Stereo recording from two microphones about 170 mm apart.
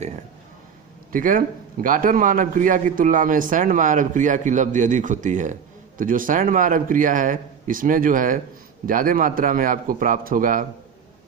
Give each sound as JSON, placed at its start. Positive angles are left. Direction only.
{"t": 1.1, "sound": "a man's voice", "side_deg": -55}